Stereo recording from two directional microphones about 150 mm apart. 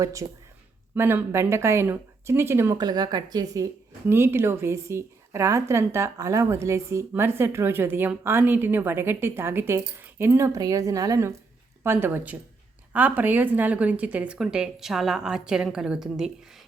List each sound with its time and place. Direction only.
0.0 s a woman's voice: 20° right (ahead or behind); by 16.3 s 5° right (ahead or behind)